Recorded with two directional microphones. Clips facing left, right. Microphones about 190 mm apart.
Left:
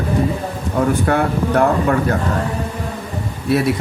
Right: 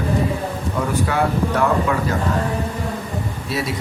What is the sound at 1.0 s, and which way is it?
Speech, 55° left (ahead or behind).